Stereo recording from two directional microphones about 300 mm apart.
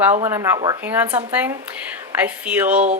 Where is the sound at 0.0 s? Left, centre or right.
Centre.